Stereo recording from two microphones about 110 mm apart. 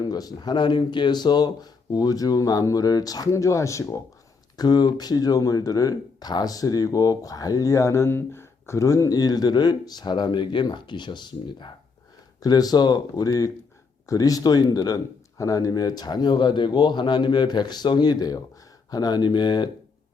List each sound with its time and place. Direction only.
0.0 s speech: 35° left (ahead or behind)